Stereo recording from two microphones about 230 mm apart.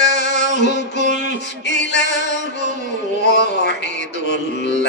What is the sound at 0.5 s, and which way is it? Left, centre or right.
Music, left.